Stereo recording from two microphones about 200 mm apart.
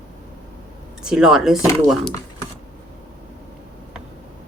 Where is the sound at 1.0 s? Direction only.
Centre (ahead or behind).